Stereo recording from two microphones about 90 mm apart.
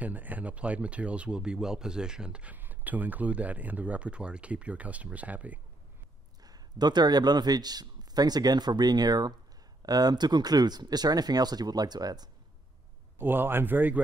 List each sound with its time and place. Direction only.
0.0 s speech: 20° right (ahead or behind)
6.4 s speech: 50° right (ahead or behind)
13.2 s speech: 20° right (ahead or behind)